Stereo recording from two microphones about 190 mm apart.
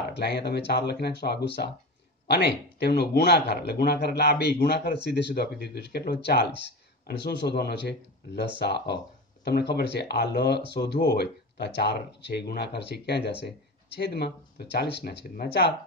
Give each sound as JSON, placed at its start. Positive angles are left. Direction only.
{"t": 0.1, "sound": "speech", "side_deg": 60}